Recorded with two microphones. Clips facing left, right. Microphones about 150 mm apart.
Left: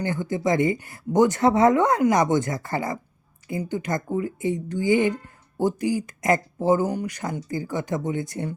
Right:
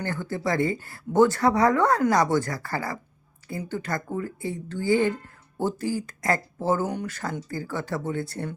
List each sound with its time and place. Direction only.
0.0 s speech: 15° left (ahead or behind)